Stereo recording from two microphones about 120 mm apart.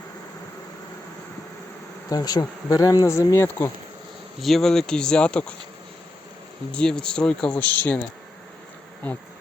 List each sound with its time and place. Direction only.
2.0 s speech: 30° left (ahead or behind)
4.4 s speech: centre (ahead or behind)
6.7 s speech: 5° left (ahead or behind)